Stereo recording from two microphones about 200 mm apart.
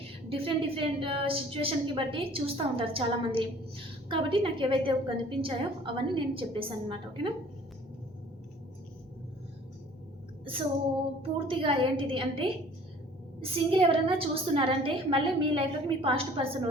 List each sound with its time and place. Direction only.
0.3 s a woman's voice: 25° right (ahead or behind)
11.2 s a woman's voice: 25° right (ahead or behind)